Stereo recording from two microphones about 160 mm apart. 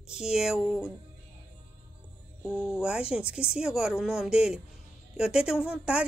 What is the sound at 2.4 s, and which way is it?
A woman's voice, 5° right (ahead or behind).